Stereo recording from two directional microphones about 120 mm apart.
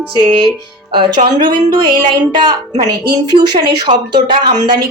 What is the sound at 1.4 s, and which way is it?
Speech, 35° right (ahead or behind).